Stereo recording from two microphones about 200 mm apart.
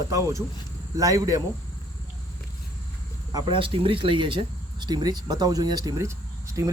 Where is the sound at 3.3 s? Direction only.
20° right (ahead or behind).